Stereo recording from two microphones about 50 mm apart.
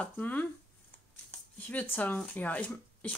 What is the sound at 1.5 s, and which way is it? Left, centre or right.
Speech, left.